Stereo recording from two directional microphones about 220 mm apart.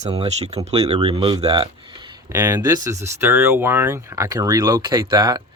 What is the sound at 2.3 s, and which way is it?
Speech, 10° right (ahead or behind).